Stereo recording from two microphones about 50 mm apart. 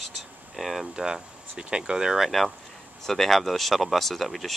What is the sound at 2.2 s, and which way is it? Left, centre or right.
Speech, centre.